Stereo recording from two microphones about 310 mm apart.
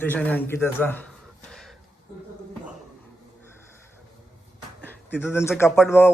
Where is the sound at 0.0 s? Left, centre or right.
Centre.